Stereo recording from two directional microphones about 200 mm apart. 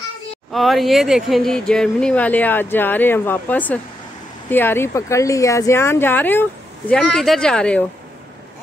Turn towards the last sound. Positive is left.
turn(degrees=5)  # may be behind; listen again after turning